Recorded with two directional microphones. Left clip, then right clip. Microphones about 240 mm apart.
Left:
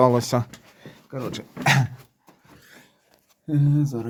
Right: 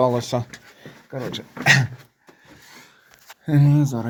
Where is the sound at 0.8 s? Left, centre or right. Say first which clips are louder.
Right 2 dB; centre.